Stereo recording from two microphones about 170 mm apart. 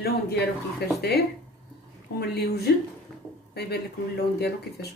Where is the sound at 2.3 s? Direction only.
70° left (ahead or behind).